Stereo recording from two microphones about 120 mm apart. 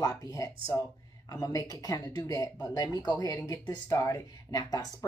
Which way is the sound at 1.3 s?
30° left (ahead or behind).